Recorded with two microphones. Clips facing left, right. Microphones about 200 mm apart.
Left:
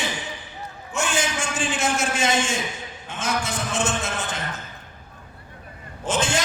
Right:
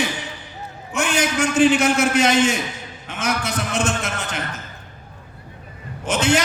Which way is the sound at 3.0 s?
60° right (ahead or behind).